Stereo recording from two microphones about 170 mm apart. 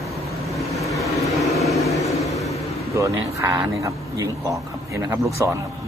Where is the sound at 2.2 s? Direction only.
20° left (ahead or behind).